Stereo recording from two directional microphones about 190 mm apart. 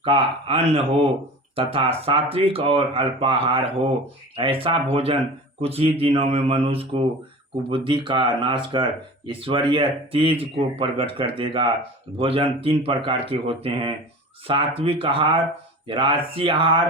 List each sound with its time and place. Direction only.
0.0 s speech: 30° right (ahead or behind)